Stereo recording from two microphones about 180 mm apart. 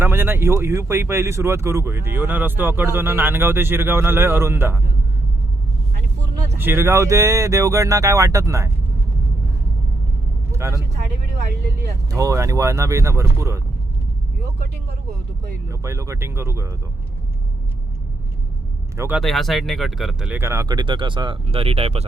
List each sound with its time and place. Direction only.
0.0 s speech: 10° right (ahead or behind)
6.6 s speech: 15° right (ahead or behind)
10.5 s speech: 15° right (ahead or behind)
12.1 s speech: 15° right (ahead or behind)
15.7 s speech: 15° right (ahead or behind)
18.9 s speech: 10° right (ahead or behind)
19.2 s speech: centre (ahead or behind); by 22.0 s 35° right (ahead or behind)